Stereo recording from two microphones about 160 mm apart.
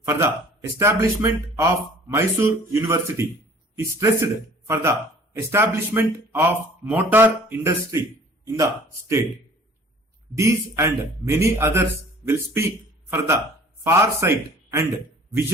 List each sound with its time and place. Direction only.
0.0 s a man's voice: 15° right (ahead or behind)
10.3 s a man's voice: 15° right (ahead or behind)